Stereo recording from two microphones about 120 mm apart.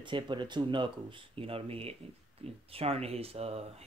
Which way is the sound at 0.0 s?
40° right (ahead or behind).